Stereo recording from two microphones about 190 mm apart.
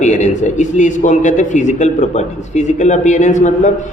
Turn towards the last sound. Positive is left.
turn(degrees=40)  # may be behind; listen again after turning